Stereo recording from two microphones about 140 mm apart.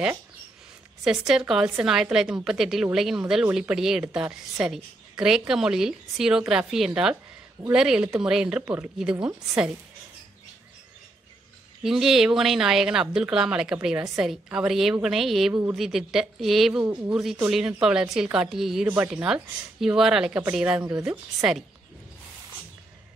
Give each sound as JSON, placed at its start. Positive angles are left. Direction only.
{"t": 1.2, "sound": "a woman's voice", "side_deg": -5}
{"t": 11.8, "sound": "a woman's voice", "side_deg": -5}